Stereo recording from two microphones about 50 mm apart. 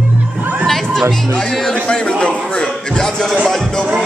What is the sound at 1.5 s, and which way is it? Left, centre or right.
Speech, centre.